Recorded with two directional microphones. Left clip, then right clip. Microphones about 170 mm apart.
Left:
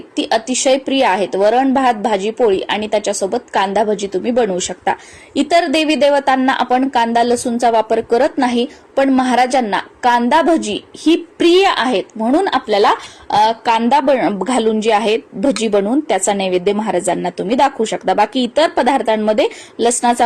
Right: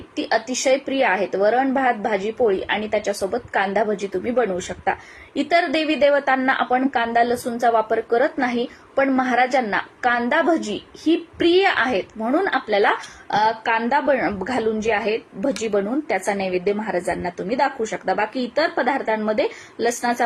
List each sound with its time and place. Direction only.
0.3 s a woman's voice: 25° left (ahead or behind)